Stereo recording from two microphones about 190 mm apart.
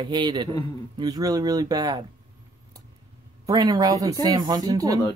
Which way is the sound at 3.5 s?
20° right (ahead or behind).